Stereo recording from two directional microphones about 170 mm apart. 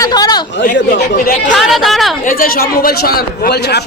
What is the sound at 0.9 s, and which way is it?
Speech, 55° left (ahead or behind).